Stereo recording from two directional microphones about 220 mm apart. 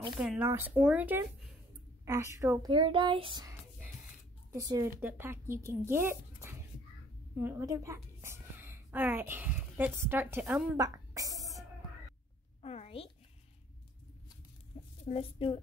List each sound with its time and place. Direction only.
0.2 s speech: 5° right (ahead or behind); by 3.5 s 20° right (ahead or behind)
4.6 s a woman's voice: 15° right (ahead or behind)
12.6 s speech: 25° left (ahead or behind)
14.7 s chicken: 25° left (ahead or behind)
15.0 s a woman's voice: 25° left (ahead or behind)